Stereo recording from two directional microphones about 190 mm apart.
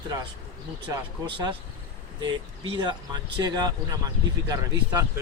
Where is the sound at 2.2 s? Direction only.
20° right (ahead or behind).